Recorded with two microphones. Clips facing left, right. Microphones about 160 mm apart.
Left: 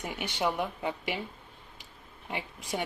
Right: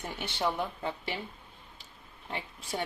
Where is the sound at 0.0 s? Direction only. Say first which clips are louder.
Left 1 dB; 10° left (ahead or behind).